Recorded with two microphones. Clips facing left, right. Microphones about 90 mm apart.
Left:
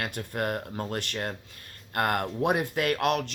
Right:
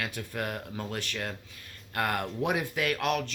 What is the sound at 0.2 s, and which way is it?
A man's voice, 40° left (ahead or behind).